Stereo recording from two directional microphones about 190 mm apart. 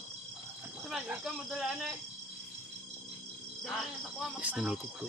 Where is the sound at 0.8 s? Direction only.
5° right (ahead or behind).